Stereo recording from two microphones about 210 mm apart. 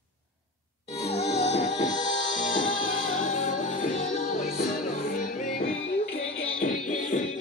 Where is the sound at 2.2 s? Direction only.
65° left (ahead or behind).